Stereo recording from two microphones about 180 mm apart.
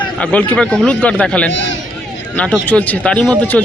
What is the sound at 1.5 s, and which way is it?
Speech, 90° left.